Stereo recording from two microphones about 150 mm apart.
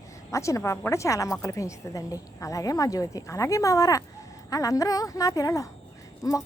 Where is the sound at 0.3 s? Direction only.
20° left (ahead or behind).